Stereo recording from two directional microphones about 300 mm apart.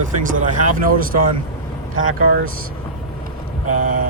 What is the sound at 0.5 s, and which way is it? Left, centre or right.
Speech, right.